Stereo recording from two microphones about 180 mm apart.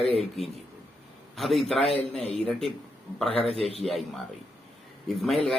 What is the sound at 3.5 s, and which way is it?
Speech, 35° right (ahead or behind).